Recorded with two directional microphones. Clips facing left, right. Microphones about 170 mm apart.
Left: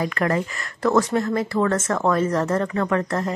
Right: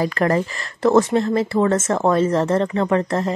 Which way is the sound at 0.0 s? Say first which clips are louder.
Right 4 dB; 35° right (ahead or behind).